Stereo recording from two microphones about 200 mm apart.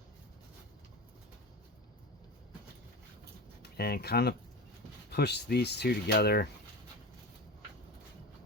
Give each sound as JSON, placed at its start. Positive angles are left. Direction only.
{"t": 3.6, "sound": "speech", "side_deg": 50}